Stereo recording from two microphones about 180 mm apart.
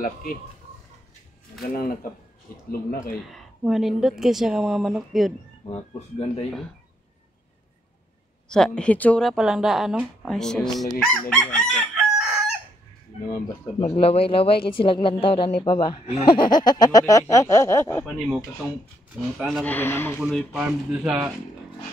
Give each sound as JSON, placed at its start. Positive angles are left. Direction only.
{"t": 0.0, "sound": "speech", "side_deg": 50}
{"t": 1.7, "sound": "speech", "side_deg": 50}
{"t": 3.3, "sound": "speech", "side_deg": 0}
{"t": 5.7, "sound": "speech", "side_deg": 35}
{"t": 8.5, "sound": "speech", "side_deg": 5}
{"t": 10.8, "sound": "chicken", "side_deg": 0}
{"t": 13.7, "sound": "speech", "side_deg": 35}
{"t": 19.3, "sound": "speech", "side_deg": 0}
{"t": 19.6, "sound": "speech", "side_deg": 10}
{"t": 20.2, "sound": "speech", "side_deg": 0}